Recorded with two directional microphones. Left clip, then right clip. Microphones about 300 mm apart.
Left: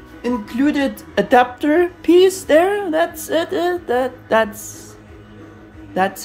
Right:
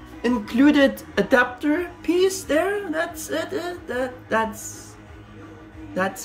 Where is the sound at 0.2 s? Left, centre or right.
Centre.